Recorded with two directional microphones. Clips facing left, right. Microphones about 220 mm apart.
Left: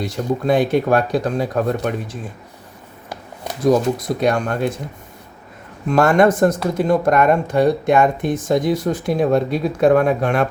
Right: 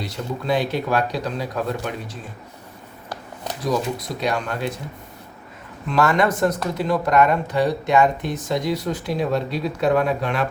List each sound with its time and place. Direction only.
0.0 s speech: 50° left (ahead or behind)
3.6 s speech: 50° left (ahead or behind)
5.9 s speech: 50° left (ahead or behind)